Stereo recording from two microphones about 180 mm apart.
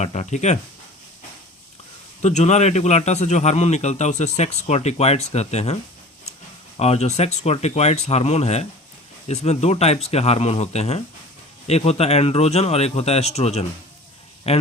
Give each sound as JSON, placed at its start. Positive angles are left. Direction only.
{"t": 0.0, "sound": "speech", "side_deg": 40}
{"t": 2.2, "sound": "speech", "side_deg": 40}
{"t": 6.7, "sound": "speech", "side_deg": 35}